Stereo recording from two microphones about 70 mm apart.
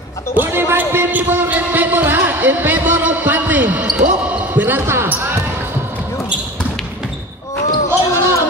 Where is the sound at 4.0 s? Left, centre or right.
Right.